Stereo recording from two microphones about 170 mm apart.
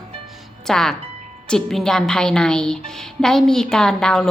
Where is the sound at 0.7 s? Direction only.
5° left (ahead or behind).